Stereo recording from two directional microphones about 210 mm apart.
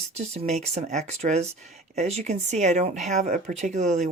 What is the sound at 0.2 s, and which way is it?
Speech, 30° right (ahead or behind).